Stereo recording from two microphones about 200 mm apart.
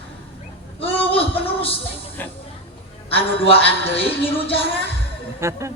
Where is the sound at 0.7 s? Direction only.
30° left (ahead or behind).